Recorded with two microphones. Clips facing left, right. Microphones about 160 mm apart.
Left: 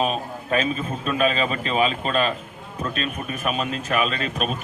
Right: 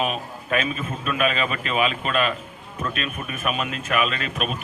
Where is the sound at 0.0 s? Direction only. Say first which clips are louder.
Left 2 dB; 35° left (ahead or behind).